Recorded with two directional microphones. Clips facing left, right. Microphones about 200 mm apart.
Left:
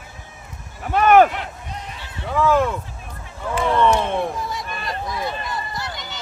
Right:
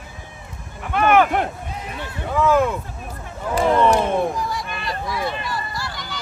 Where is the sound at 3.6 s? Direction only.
35° right (ahead or behind).